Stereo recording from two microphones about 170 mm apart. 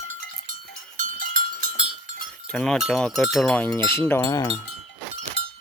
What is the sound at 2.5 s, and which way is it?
Speech, 5° left (ahead or behind).